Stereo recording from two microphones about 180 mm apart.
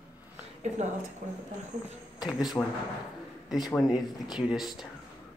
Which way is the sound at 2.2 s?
20° left (ahead or behind).